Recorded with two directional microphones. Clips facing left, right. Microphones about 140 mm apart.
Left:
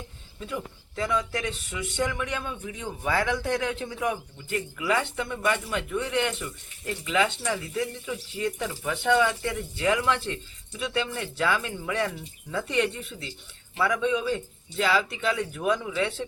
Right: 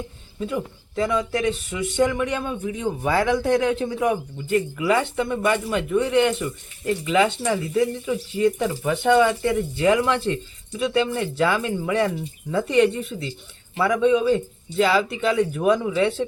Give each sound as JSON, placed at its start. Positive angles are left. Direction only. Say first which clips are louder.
{"t": 0.3, "sound": "speech", "louder": "right 7 dB", "side_deg": -25}